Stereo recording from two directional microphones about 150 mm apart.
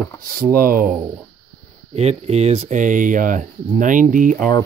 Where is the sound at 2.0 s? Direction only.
45° right (ahead or behind).